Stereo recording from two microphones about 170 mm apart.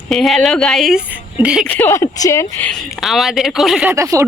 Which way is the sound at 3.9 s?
15° right (ahead or behind).